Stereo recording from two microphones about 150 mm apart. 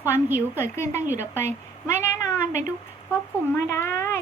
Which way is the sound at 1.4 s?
15° left (ahead or behind).